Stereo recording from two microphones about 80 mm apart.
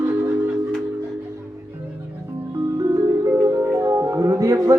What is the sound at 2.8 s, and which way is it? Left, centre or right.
Music, right.